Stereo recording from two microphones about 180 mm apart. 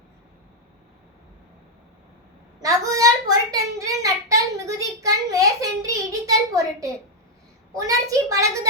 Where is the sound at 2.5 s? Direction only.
20° right (ahead or behind).